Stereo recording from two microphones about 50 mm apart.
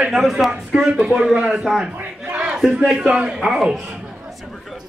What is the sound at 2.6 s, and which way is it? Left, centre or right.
Speech, centre.